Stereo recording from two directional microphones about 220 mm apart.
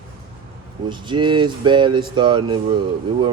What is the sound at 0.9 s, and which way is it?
Speech, 20° right (ahead or behind).